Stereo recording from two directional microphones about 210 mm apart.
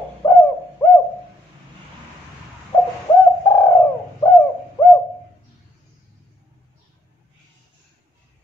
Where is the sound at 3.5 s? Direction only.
10° left (ahead or behind).